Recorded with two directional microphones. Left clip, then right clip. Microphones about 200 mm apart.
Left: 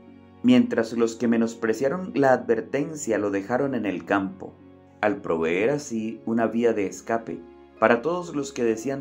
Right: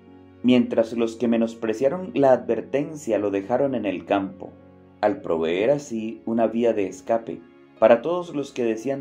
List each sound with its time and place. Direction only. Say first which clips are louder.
0.4 s speech: right 1 dB; 20° left (ahead or behind)